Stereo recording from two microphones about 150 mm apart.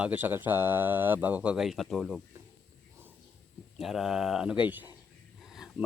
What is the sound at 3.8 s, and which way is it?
A man's voice, centre (ahead or behind).